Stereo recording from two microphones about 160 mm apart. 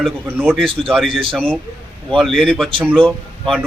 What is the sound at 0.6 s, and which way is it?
Speech, 35° right (ahead or behind).